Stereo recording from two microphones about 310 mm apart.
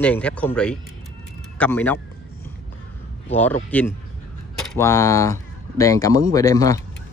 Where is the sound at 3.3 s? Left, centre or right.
Centre.